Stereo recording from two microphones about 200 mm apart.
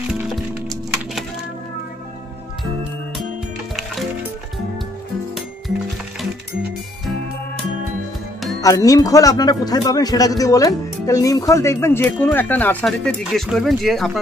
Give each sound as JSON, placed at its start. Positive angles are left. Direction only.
{"t": 8.5, "sound": "speech", "side_deg": 15}